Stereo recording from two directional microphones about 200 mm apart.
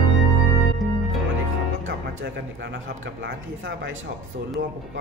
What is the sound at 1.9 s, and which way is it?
A man's voice, 65° right (ahead or behind).